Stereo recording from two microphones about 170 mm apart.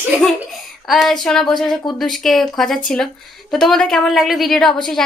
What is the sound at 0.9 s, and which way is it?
A woman's voice, centre (ahead or behind).